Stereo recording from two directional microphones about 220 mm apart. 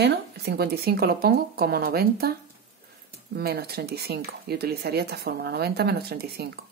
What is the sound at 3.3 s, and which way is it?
Speech, 45° right (ahead or behind).